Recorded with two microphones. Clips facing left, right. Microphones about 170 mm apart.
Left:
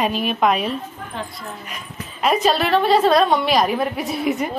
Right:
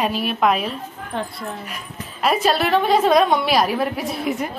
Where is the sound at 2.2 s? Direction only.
5° right (ahead or behind).